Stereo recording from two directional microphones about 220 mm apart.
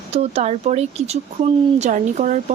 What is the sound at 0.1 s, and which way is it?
Speech, 30° right (ahead or behind).